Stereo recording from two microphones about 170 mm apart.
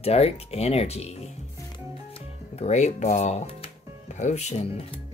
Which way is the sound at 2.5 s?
40° left (ahead or behind).